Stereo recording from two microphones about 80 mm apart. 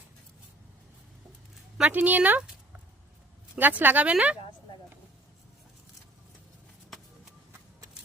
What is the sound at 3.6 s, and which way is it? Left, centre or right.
Speech, right.